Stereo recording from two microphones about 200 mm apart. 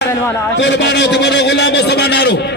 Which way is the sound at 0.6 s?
60° left (ahead or behind).